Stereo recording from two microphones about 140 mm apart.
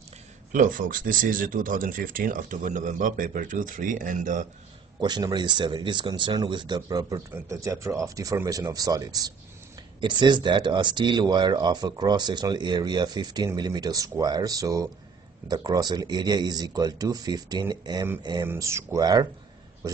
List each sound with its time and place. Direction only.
0.5 s speech: 70° right (ahead or behind)
5.0 s speech: 30° right (ahead or behind)
18.5 s speech: 20° right (ahead or behind)